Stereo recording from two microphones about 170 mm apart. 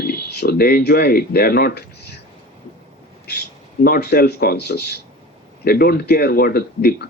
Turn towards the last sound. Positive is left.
turn(degrees=65)  # may be behind; listen again after turning